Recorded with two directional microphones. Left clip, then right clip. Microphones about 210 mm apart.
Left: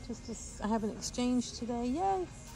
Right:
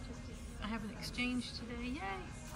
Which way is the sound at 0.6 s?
15° left (ahead or behind).